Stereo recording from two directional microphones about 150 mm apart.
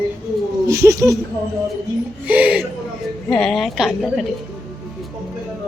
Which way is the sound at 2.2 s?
10° right (ahead or behind).